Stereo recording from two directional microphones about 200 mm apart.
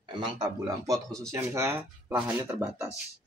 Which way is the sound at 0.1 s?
20° right (ahead or behind).